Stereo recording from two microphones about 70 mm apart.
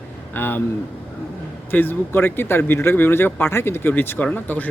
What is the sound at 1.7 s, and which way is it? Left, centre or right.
Speech, left.